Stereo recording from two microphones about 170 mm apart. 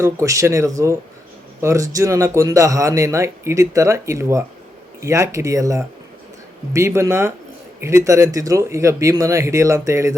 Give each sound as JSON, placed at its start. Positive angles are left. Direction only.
{"t": 0.0, "sound": "speech", "side_deg": -15}